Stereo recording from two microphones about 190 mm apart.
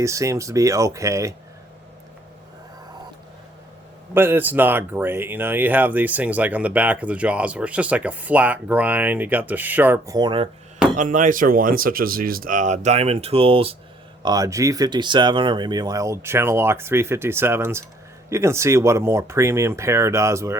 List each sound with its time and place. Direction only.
0.0 s speech: 15° right (ahead or behind)
4.1 s speech: 10° right (ahead or behind)
10.2 s speech: 25° right (ahead or behind)
10.9 s speech: 45° right (ahead or behind); by 20.6 s 15° right (ahead or behind)